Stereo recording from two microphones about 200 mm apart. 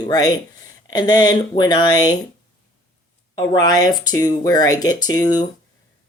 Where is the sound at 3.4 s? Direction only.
20° left (ahead or behind).